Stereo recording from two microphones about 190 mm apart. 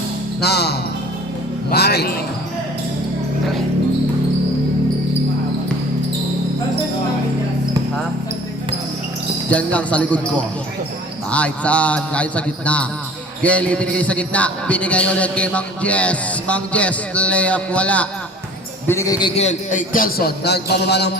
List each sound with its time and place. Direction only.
0.4 s speech: 60° left (ahead or behind)
9.5 s a man's voice: 5° left (ahead or behind)
19.4 s a man's voice: 40° left (ahead or behind); by 21.1 s 60° left (ahead or behind)